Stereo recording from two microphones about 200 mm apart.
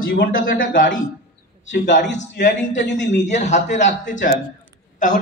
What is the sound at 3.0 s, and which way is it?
A man's voice, 35° left (ahead or behind).